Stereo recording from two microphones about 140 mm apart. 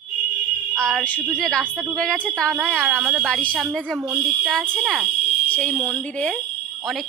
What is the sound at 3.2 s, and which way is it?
A woman's voice, 10° left (ahead or behind).